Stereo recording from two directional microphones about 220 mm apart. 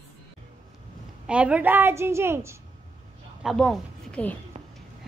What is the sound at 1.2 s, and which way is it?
A woman's voice, 5° right (ahead or behind).